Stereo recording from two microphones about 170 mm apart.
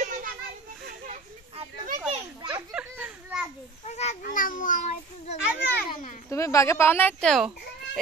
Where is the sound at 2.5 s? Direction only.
10° right (ahead or behind).